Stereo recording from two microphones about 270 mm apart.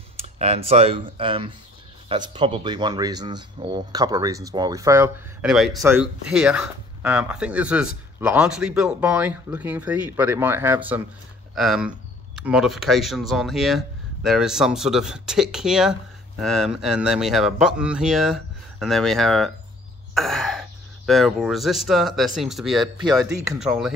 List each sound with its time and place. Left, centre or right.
0.2 s speech: right; by 22.8 s centre
23.0 s speech: centre
23.6 s speech: centre